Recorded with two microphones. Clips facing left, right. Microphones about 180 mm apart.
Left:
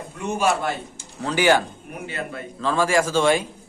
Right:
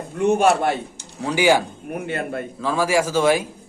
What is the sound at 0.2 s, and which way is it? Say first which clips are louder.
Speech: right 6 dB; 60° right (ahead or behind).